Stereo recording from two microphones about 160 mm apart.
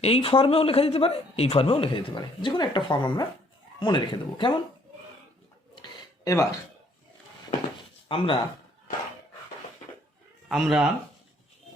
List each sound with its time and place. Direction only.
0.0 s speech: 35° left (ahead or behind)
5.7 s a sound: 25° left (ahead or behind)
8.0 s speech: 35° left (ahead or behind)
10.5 s speech: 5° right (ahead or behind)